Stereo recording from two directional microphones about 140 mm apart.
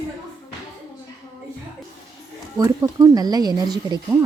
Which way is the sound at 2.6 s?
25° right (ahead or behind).